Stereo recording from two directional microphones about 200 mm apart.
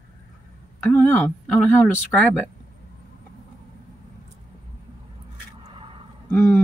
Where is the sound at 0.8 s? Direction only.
10° left (ahead or behind).